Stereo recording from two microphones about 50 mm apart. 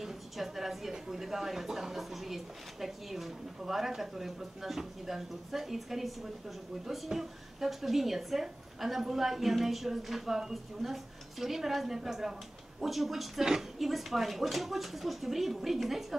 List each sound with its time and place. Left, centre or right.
0.0 s a woman's voice: centre